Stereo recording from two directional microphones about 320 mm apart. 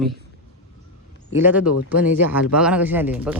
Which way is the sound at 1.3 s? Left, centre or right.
Centre.